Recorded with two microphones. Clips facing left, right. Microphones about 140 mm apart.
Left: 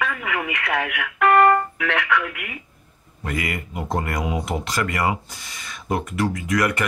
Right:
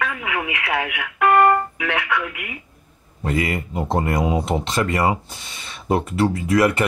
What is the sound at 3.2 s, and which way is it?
Speech, 30° right (ahead or behind).